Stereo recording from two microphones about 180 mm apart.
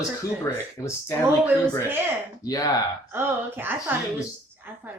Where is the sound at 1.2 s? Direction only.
10° right (ahead or behind).